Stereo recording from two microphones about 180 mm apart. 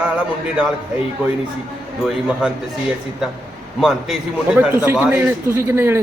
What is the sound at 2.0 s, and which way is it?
Speech, 5° right (ahead or behind).